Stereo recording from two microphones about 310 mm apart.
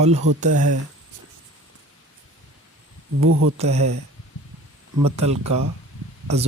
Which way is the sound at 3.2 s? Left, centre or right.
Right.